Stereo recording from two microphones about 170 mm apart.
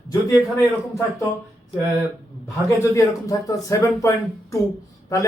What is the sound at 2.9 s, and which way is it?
Speech, 20° left (ahead or behind).